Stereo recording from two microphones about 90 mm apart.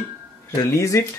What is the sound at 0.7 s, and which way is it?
Speech, 35° left (ahead or behind).